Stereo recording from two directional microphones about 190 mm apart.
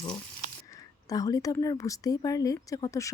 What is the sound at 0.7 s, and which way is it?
Speech, 20° left (ahead or behind).